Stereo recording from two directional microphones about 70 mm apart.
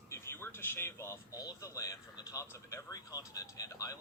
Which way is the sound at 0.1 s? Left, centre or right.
Left.